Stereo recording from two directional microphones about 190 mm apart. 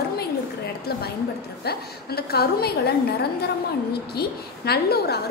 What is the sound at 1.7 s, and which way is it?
A woman's voice, 55° left (ahead or behind).